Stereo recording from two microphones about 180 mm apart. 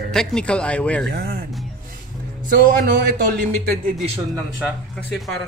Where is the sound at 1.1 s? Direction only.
60° right (ahead or behind).